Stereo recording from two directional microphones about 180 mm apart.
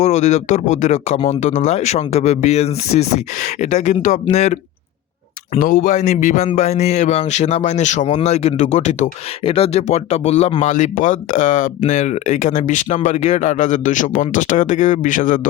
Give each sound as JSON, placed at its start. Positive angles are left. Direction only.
{"t": 0.0, "sound": "a man's voice", "side_deg": 40}
{"t": 5.5, "sound": "a man's voice", "side_deg": 50}